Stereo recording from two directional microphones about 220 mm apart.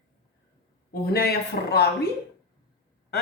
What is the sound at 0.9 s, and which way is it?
Speech, 45° left (ahead or behind).